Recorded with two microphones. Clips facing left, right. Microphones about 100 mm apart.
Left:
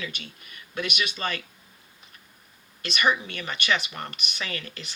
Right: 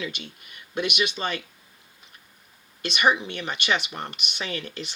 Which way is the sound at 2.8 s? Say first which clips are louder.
Right 2 dB; 20° right (ahead or behind).